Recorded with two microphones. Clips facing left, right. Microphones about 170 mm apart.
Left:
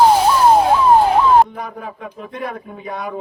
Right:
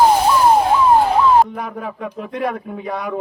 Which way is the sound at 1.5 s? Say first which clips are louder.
Right 3 dB; 65° right (ahead or behind).